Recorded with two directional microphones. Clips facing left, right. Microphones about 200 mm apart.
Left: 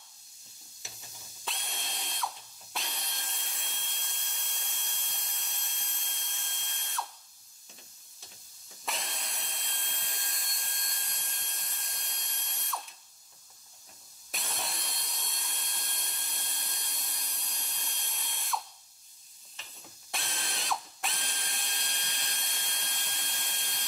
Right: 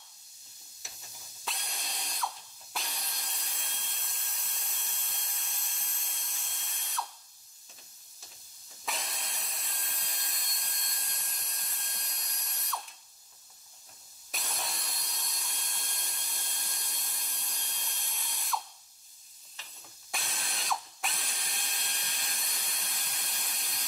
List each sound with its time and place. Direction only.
1.4 s drill: centre (ahead or behind)
8.8 s drill: centre (ahead or behind)
14.3 s tools: centre (ahead or behind)
20.1 s ratchet: centre (ahead or behind)